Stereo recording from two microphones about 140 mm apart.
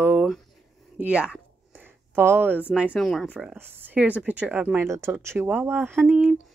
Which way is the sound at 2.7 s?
10° right (ahead or behind).